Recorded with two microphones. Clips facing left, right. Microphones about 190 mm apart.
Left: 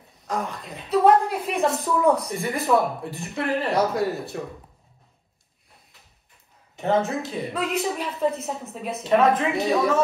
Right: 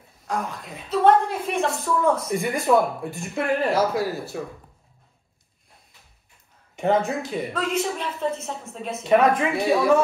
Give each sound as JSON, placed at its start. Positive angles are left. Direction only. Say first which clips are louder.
{"t": 0.2, "sound": "a woman's voice", "louder": "even", "side_deg": 0}
{"t": 6.8, "sound": "a woman's voice", "louder": "right 1 dB", "side_deg": 0}